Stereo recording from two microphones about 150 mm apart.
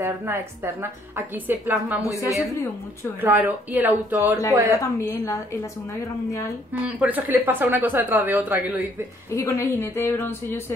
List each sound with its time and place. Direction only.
0.0 s speech: 15° right (ahead or behind)
3.2 s speech: 10° right (ahead or behind)
4.7 s a woman's voice: 20° left (ahead or behind)
6.7 s speech: 10° right (ahead or behind)
9.3 s a woman's voice: 20° left (ahead or behind)